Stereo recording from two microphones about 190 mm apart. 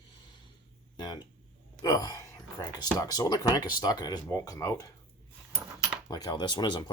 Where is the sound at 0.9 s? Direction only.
20° left (ahead or behind).